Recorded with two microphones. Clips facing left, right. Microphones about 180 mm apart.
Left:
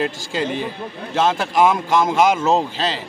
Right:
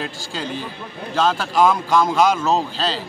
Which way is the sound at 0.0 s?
60° left (ahead or behind).